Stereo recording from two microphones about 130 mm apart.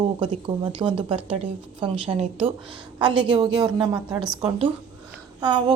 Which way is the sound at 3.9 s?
30° right (ahead or behind).